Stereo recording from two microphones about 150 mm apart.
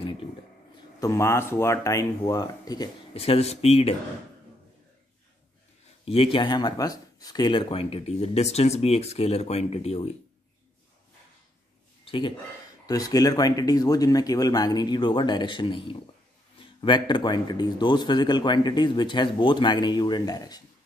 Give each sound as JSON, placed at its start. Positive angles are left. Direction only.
{"t": 0.9, "sound": "speech", "side_deg": 20}
{"t": 3.2, "sound": "speech", "side_deg": 45}
{"t": 6.0, "sound": "speech", "side_deg": 35}
{"t": 12.0, "sound": "speech", "side_deg": 35}
{"t": 12.8, "sound": "speech", "side_deg": 25}